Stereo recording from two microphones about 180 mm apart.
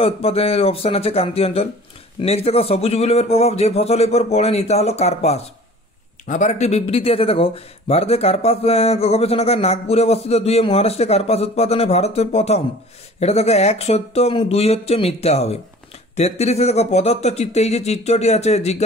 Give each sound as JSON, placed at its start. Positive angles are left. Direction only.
{"t": 0.0, "sound": "speech", "side_deg": 35}